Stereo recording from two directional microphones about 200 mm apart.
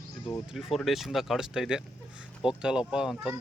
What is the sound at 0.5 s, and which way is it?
Speech, centre (ahead or behind).